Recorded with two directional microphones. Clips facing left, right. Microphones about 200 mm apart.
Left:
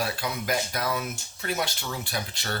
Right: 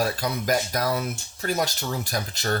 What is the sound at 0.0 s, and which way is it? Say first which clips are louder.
Speech: right 4 dB; 40° right (ahead or behind).